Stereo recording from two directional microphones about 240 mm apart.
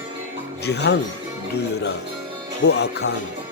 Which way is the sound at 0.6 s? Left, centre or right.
Left.